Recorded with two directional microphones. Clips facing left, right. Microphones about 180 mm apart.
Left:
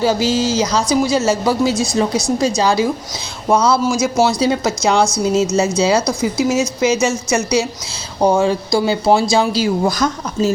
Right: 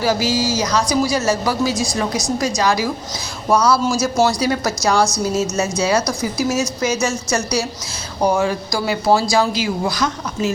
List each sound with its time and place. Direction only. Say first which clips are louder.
0.0 s speech: left 3 dB; 25° left (ahead or behind)
3.8 s speech: left 2 dB; 10° left (ahead or behind)
4.4 s speech: left 3 dB; 25° left (ahead or behind)
9.8 s speech: left 4 dB; 45° left (ahead or behind)